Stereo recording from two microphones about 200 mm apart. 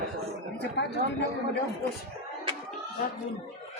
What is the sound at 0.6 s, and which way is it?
Speech, 60° left (ahead or behind).